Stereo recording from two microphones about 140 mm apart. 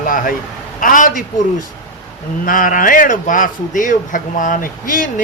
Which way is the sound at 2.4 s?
75° left (ahead or behind).